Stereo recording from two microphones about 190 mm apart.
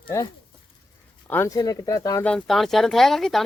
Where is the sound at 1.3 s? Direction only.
15° left (ahead or behind).